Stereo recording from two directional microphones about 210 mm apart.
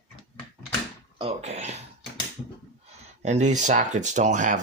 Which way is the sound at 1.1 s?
30° right (ahead or behind).